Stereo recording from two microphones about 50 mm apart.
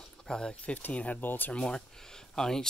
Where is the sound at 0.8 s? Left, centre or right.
Left.